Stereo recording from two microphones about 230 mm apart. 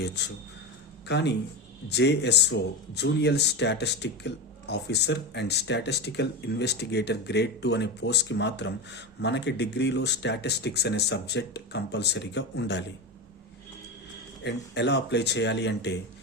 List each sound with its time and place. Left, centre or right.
0.0 s speech: left
14.4 s speech: left